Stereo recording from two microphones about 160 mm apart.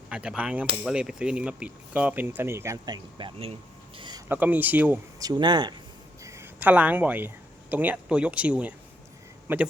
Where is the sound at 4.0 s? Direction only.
30° right (ahead or behind).